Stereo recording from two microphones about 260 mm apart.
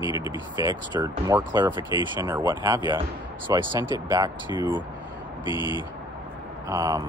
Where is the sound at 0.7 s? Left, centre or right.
Centre.